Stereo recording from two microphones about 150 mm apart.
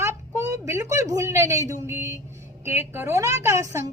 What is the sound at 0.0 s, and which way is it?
A woman's voice, 20° right (ahead or behind).